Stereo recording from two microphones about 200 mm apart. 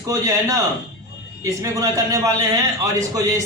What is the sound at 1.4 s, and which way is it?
A man's voice, 15° right (ahead or behind).